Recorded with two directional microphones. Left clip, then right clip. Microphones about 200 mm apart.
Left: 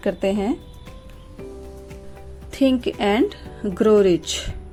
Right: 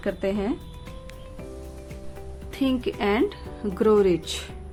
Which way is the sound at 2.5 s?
20° left (ahead or behind).